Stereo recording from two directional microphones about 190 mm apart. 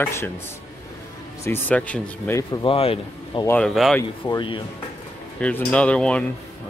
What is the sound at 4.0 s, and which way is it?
Speech, 20° left (ahead or behind).